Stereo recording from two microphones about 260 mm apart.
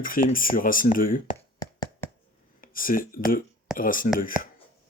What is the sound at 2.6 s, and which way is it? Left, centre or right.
Speech, left.